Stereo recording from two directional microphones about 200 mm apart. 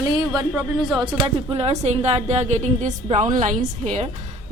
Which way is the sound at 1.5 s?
30° right (ahead or behind).